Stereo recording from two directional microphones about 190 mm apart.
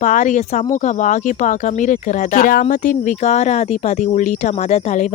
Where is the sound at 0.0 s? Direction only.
40° left (ahead or behind).